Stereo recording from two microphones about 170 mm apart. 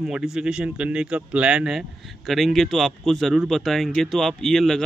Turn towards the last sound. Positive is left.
turn(degrees=0)  # may be behind; listen again after turning